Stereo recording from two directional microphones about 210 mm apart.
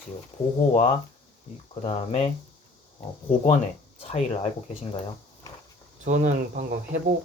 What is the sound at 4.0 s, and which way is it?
Speech, 30° left (ahead or behind).